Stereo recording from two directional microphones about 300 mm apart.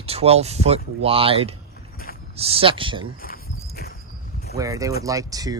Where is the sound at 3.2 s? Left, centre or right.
Left.